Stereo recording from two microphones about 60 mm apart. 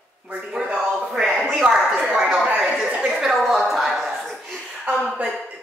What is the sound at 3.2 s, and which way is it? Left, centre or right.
A woman's voice, centre.